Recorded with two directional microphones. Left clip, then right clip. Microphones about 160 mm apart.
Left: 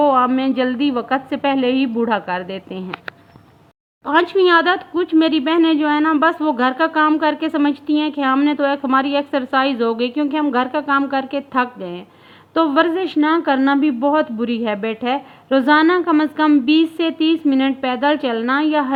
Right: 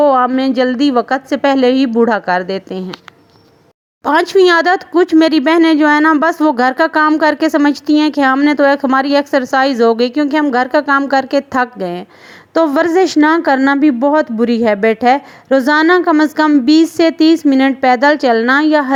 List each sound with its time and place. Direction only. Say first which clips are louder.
0.0 s a sound: right 4 dB; 40° right (ahead or behind)
0.3 s a woman's voice: right 5 dB; 40° right (ahead or behind)
4.0 s a woman's voice: right 5 dB; 50° right (ahead or behind)